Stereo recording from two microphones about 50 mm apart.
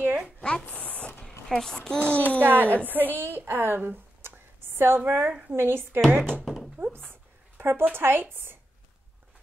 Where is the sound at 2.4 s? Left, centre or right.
Right.